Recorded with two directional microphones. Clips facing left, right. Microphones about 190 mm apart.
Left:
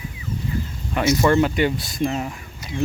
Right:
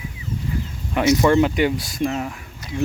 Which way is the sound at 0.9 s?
15° right (ahead or behind).